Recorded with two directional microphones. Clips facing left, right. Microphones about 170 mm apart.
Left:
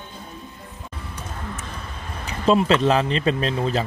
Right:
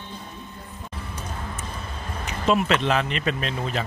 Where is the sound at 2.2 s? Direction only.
30° left (ahead or behind).